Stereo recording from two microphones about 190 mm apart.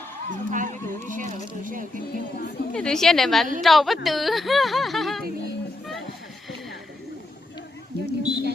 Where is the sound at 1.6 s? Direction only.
45° right (ahead or behind).